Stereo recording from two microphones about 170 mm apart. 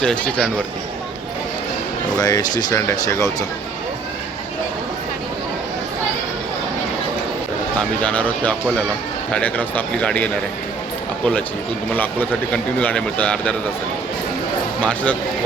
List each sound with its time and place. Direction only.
0.0 s speech: 5° left (ahead or behind)
2.1 s speech: 20° left (ahead or behind)
7.8 s speech: 10° left (ahead or behind)
12.5 s speech: 5° left (ahead or behind)
14.8 s speech: 10° left (ahead or behind)